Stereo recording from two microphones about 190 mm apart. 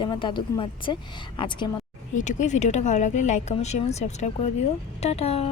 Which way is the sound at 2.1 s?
40° left (ahead or behind).